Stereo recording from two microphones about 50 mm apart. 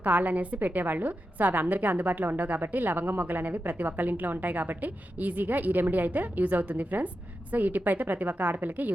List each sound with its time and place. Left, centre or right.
0.0 s a woman's voice: right